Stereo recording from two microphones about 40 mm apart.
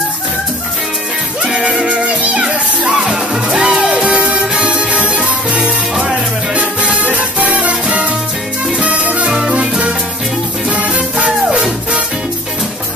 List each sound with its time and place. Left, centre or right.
3.1 s music: right
6.5 s music: right
9.3 s music: centre
9.6 s music: right